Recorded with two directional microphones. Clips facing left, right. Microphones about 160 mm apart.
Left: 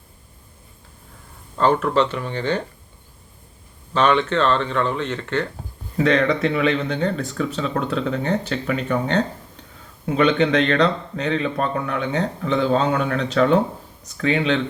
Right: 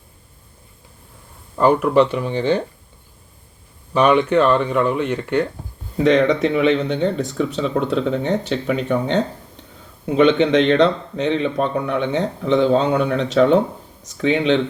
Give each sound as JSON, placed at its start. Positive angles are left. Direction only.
{"t": 1.5, "sound": "speech", "side_deg": -10}
{"t": 3.9, "sound": "speech", "side_deg": -15}